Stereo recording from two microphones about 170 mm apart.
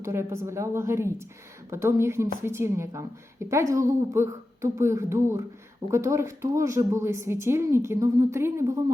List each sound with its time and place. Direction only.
0.0 s a woman's voice: 15° right (ahead or behind)